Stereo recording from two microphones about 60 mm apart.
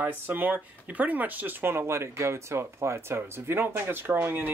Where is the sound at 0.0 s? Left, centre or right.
Right.